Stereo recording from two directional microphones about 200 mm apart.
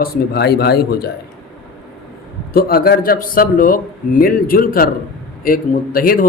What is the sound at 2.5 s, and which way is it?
A man's voice, 45° left (ahead or behind).